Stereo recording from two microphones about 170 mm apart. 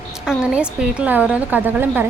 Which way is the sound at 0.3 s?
5° right (ahead or behind).